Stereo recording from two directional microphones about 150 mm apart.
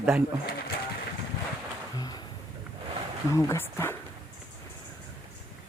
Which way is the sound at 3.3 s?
20° left (ahead or behind).